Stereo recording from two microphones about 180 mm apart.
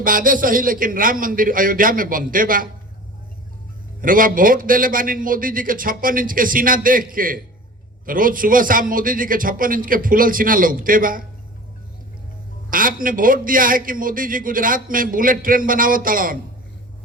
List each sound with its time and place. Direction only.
0.0 s a man's voice: 50° right (ahead or behind)
4.0 s a man's voice: 50° right (ahead or behind)
12.7 s a man's voice: 50° right (ahead or behind)